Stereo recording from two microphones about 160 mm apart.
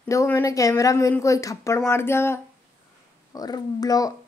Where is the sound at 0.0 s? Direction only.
15° left (ahead or behind).